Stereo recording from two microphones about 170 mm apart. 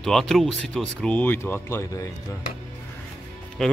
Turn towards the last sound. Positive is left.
turn(degrees=0)  # may be behind; listen again after turning